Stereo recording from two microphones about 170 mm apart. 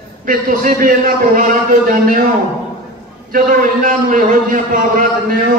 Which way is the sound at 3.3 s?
55° right (ahead or behind).